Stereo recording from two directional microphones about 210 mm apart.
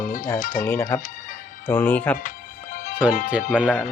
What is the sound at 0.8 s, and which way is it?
Speech, 15° left (ahead or behind).